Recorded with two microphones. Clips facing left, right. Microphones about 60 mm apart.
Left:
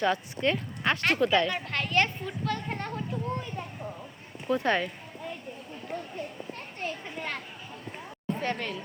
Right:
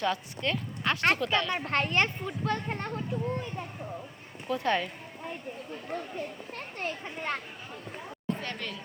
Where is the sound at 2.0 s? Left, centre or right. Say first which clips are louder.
Left 1 dB; right.